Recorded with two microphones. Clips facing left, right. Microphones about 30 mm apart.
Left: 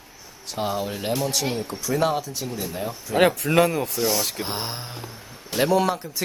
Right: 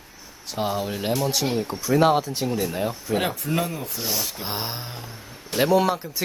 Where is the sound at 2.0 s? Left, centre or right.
Right.